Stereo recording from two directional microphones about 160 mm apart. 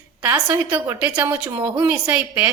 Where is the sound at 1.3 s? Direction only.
30° right (ahead or behind).